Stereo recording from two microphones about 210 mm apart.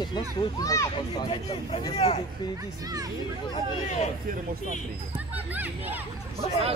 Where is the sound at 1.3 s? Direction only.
25° left (ahead or behind).